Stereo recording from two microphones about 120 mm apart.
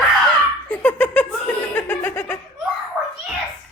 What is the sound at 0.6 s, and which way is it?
Laughter, 10° left (ahead or behind).